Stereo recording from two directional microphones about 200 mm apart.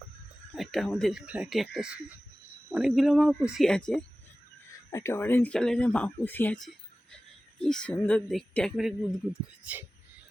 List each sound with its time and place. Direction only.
0.5 s speech: centre (ahead or behind)
4.9 s speech: 15° left (ahead or behind)